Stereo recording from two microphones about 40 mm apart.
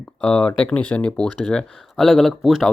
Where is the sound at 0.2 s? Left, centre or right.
Left.